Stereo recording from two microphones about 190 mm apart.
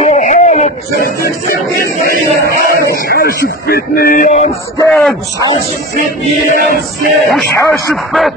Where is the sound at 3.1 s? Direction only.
50° left (ahead or behind).